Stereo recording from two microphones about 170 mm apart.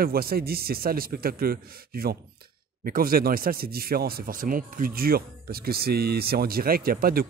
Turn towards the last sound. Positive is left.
turn(degrees=-60)  # may be behind; listen again after turning